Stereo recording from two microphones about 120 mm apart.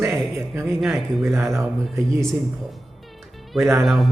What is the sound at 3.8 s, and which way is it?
Speech, centre (ahead or behind).